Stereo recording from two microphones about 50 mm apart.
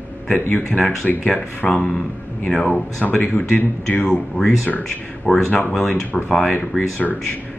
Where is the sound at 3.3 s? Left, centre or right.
Left.